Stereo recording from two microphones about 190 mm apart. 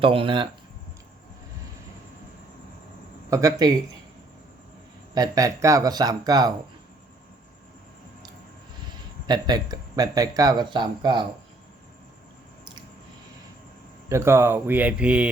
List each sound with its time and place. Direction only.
0.0 s speech: 30° right (ahead or behind)
3.2 s speech: 15° right (ahead or behind)
5.1 s speech: 20° right (ahead or behind)
9.2 s speech: 20° right (ahead or behind)
14.1 s speech: 15° right (ahead or behind)